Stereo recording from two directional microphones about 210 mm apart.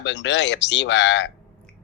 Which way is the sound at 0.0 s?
60° left (ahead or behind).